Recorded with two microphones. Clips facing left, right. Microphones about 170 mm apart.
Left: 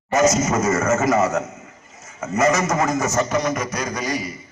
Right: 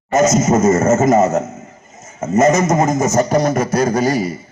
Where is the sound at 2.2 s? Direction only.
20° right (ahead or behind).